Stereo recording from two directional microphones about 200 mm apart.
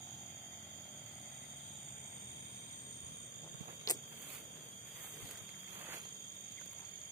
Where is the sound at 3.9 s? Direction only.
15° left (ahead or behind).